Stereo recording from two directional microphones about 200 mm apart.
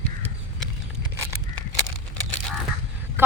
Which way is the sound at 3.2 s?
10° right (ahead or behind).